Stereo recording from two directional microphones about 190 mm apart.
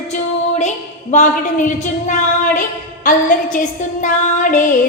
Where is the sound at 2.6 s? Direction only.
45° left (ahead or behind).